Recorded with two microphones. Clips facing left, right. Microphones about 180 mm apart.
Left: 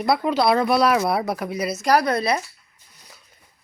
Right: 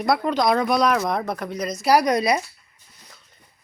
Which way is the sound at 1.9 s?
15° right (ahead or behind).